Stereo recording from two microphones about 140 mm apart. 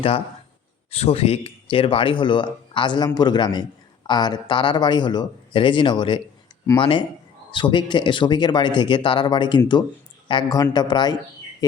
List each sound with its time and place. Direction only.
0.9 s a man's voice: 45° left (ahead or behind)